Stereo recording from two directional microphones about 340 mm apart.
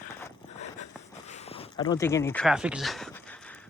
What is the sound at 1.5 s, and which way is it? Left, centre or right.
Speech, centre.